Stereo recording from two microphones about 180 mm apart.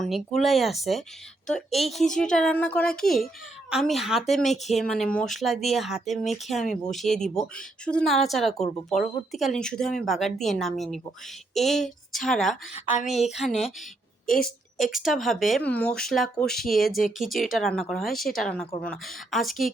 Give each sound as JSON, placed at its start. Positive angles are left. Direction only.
{"t": 0.1, "sound": "speech", "side_deg": 0}
{"t": 14.3, "sound": "a woman's voice", "side_deg": 55}
{"t": 14.8, "sound": "speech", "side_deg": 0}